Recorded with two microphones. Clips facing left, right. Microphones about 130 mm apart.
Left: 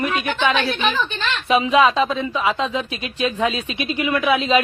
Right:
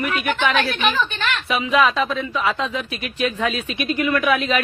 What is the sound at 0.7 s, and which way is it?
A woman's voice, 30° left (ahead or behind).